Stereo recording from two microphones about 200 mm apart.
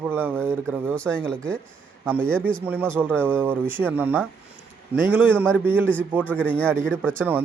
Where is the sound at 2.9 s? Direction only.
10° right (ahead or behind).